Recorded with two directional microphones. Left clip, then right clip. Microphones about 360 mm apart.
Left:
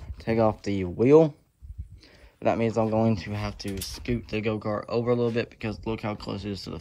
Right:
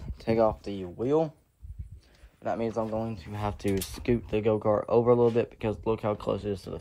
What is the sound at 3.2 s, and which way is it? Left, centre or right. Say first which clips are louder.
Speech: right 1 dB; centre.